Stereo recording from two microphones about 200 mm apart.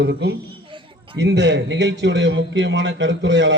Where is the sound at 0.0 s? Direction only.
55° right (ahead or behind).